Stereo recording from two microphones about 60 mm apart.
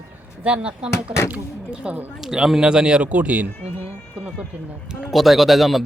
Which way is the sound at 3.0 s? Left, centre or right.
Right.